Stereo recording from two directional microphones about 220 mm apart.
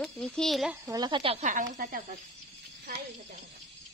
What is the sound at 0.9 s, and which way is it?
Speech, 20° right (ahead or behind).